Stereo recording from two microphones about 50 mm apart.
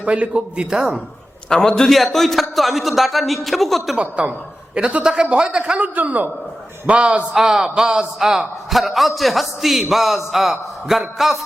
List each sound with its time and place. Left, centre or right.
0.0 s a man's voice: right
1.5 s a man's voice: centre
3.9 s a man's voice: right
5.8 s a man's voice: right
7.3 s a man's voice: centre